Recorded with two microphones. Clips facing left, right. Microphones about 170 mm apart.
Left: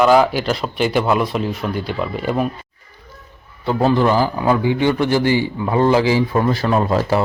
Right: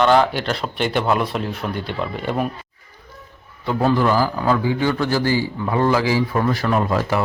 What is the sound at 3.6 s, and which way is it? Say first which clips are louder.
A man's voice: left 2 dB; 30° left (ahead or behind).